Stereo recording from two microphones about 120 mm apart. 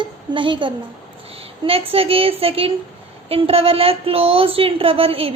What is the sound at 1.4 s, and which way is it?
Child singing, 55° right (ahead or behind).